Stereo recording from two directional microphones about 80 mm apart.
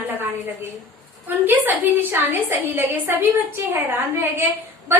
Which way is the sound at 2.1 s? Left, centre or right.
Right.